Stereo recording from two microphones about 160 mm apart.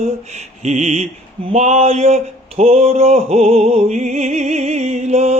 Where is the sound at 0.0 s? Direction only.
45° right (ahead or behind).